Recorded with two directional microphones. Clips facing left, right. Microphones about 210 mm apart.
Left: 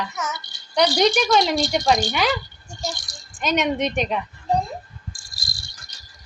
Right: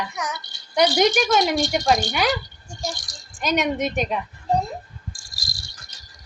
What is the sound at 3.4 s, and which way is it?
Speech, centre (ahead or behind).